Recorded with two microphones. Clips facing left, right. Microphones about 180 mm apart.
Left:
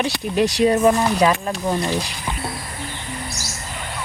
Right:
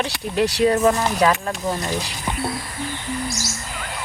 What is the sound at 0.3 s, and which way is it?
Speech, 15° left (ahead or behind).